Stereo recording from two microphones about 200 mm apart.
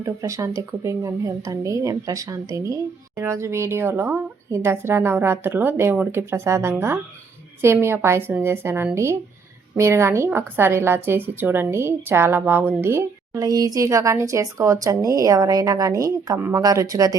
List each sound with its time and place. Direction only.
0.0 s a woman's voice: 15° right (ahead or behind)